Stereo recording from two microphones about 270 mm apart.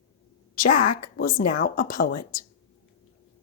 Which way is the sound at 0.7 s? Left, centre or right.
Left.